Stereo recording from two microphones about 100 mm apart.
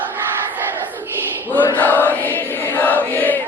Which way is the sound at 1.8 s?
20° left (ahead or behind).